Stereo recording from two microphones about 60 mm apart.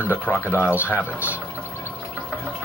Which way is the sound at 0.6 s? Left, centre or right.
Right.